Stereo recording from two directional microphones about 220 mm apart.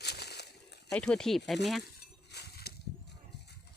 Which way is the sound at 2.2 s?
45° left (ahead or behind).